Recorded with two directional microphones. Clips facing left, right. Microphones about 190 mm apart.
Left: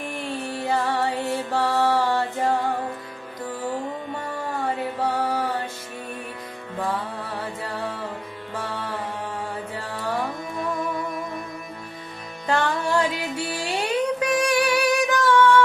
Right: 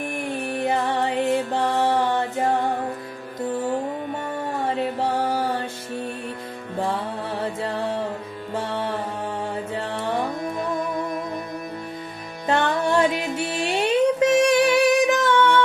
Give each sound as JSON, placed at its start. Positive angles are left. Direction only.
{"t": 0.0, "sound": "music", "side_deg": -15}
{"t": 4.8, "sound": "music", "side_deg": -30}
{"t": 6.7, "sound": "music", "side_deg": -25}
{"t": 8.5, "sound": "music", "side_deg": -25}
{"t": 12.5, "sound": "music", "side_deg": -25}